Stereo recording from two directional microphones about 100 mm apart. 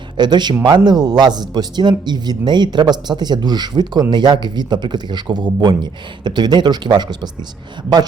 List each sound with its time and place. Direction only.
0.2 s a man's voice: 45° right (ahead or behind)